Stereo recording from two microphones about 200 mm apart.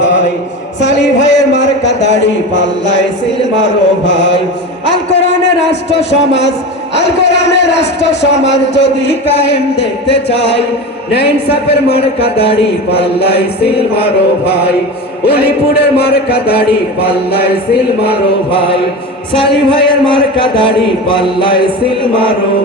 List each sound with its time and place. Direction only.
0.0 s a sound: 60° left (ahead or behind)
2.2 s a man's voice: 60° left (ahead or behind)
4.9 s a sound: 60° left (ahead or behind)
5.9 s a man's voice: 60° left (ahead or behind)
11.9 s speech: 30° left (ahead or behind)
13.2 s a man's voice: 55° left (ahead or behind)
14.0 s speech: 30° left (ahead or behind)
15.7 s a man's voice: 55° left (ahead or behind)
18.0 s speech: 25° left (ahead or behind)